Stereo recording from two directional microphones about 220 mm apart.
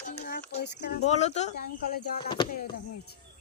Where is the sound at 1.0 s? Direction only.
30° left (ahead or behind).